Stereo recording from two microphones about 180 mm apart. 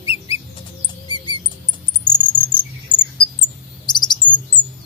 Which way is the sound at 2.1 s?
25° left (ahead or behind).